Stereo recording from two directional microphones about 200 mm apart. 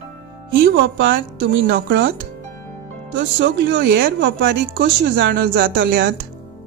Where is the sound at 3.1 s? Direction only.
60° right (ahead or behind).